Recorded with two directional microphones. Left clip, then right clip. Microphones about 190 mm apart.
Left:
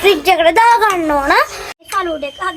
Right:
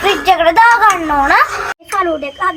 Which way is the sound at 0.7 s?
80° left.